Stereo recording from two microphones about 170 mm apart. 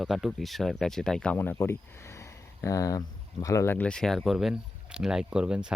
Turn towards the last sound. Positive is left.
turn(degrees=-5)  # may be behind; listen again after turning